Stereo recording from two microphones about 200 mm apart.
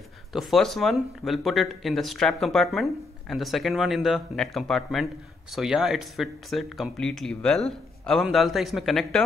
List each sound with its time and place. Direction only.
0.3 s speech: centre (ahead or behind)